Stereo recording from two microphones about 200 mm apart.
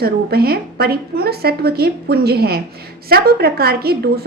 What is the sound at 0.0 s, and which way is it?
A woman's voice, 50° right (ahead or behind).